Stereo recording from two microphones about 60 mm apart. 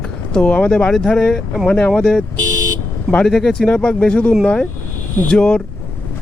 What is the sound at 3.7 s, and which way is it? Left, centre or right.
Speech, left.